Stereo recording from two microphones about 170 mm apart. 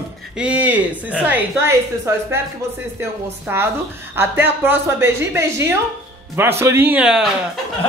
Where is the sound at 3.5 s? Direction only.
15° right (ahead or behind).